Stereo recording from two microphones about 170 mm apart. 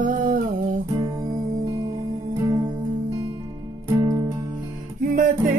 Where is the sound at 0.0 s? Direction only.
55° right (ahead or behind).